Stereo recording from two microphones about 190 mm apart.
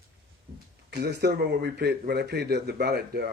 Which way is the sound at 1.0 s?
60° right (ahead or behind).